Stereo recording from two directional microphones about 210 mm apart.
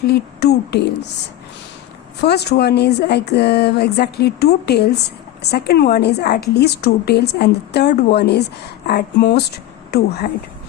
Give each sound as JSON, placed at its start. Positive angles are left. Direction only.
{"t": 0.0, "sound": "a woman's voice", "side_deg": 50}
{"t": 2.2, "sound": "a woman's voice", "side_deg": 50}